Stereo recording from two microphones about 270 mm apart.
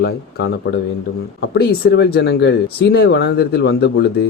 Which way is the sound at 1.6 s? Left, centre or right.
Left.